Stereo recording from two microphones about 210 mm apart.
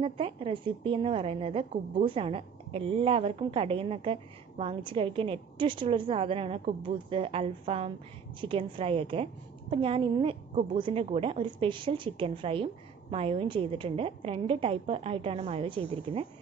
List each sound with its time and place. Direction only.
0.0 s a woman's voice: 25° right (ahead or behind)